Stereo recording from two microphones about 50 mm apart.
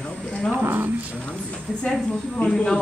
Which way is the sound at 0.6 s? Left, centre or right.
Right.